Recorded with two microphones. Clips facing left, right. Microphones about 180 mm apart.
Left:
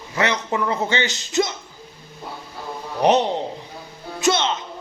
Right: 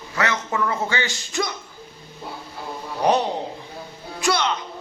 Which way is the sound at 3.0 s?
20° left (ahead or behind).